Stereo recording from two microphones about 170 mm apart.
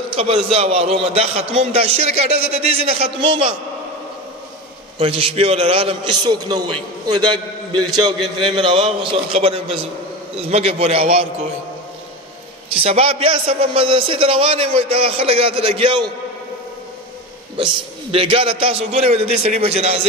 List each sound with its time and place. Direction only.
0.1 s a man's voice: 30° right (ahead or behind)
4.9 s a man's voice: 35° right (ahead or behind)
12.8 s a man's voice: 35° right (ahead or behind)
17.6 s a man's voice: 30° right (ahead or behind)